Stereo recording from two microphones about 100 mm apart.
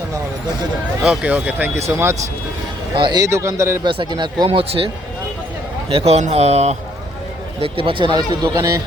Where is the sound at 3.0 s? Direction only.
55° right (ahead or behind).